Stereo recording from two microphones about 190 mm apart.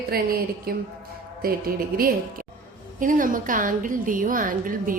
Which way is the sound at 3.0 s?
45° right (ahead or behind).